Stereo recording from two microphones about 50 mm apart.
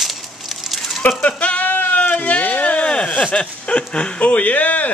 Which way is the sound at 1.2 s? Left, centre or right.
Left.